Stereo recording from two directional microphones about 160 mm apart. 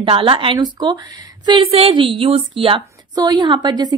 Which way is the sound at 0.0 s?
35° right (ahead or behind).